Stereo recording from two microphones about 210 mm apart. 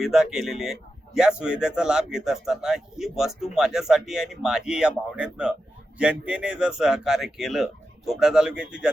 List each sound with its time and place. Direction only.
0.0 s speech: centre (ahead or behind)